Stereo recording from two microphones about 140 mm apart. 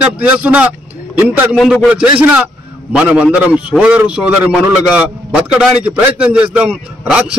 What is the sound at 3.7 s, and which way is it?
A man's voice, 10° right (ahead or behind).